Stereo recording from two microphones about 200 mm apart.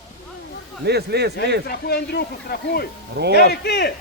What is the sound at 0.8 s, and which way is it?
Speech, 55° right (ahead or behind).